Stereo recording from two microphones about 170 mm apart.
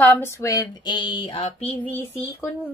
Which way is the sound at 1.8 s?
10° left (ahead or behind).